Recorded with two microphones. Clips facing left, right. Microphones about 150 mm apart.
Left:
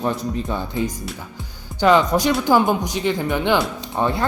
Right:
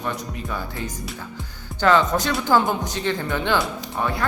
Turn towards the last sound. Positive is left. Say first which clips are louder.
# left 4 dB
turn(degrees=25)  # may be behind; listen again after turning